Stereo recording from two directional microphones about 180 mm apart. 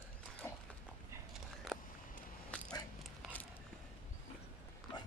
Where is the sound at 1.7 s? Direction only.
Centre (ahead or behind).